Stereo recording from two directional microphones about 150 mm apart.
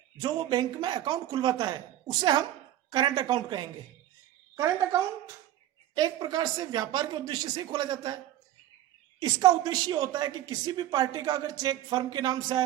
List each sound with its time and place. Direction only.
0.2 s a woman's voice: 25° right (ahead or behind)
9.2 s a woman's voice: 25° right (ahead or behind)